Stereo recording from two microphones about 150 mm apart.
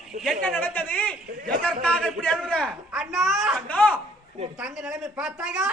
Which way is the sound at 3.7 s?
10° left (ahead or behind).